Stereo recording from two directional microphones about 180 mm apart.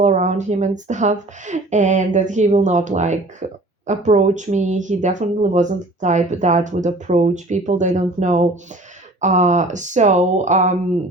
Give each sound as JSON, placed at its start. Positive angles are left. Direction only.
{"t": 0.0, "sound": "speech", "side_deg": -40}